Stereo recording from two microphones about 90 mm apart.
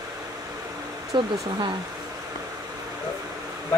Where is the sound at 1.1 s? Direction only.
55° right (ahead or behind).